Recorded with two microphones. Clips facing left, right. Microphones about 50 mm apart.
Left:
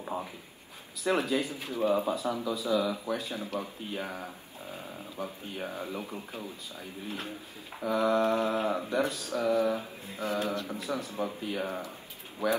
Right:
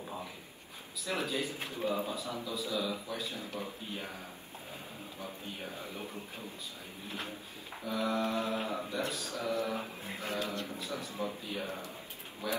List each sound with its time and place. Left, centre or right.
1.0 s speech: left
9.8 s mantra: right
10.2 s speech: left